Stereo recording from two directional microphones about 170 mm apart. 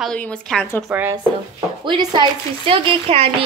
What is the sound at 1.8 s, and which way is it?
A woman's voice, 25° right (ahead or behind).